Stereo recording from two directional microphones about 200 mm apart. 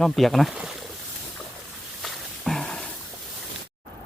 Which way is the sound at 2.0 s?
Centre (ahead or behind).